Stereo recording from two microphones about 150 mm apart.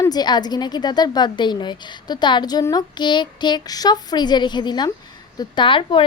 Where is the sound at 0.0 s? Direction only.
25° left (ahead or behind).